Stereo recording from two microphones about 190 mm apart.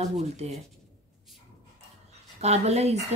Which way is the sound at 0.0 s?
35° right (ahead or behind).